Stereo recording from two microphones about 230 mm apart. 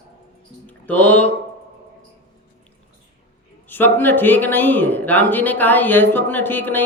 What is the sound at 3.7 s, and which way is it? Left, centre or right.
Speech, centre.